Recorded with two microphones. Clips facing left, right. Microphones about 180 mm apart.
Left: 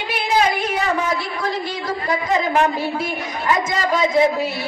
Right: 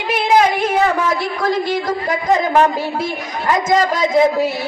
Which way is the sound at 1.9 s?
40° right (ahead or behind).